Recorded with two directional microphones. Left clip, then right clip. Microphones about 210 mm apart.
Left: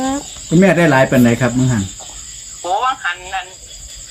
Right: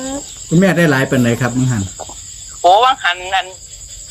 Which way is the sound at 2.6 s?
50° right (ahead or behind).